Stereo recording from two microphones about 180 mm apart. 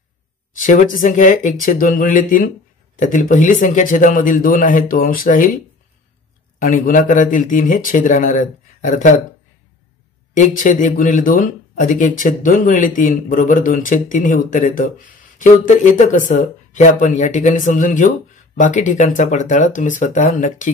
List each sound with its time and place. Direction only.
0.6 s speech: 45° left (ahead or behind)
6.6 s speech: 45° left (ahead or behind)
10.3 s speech: 45° left (ahead or behind)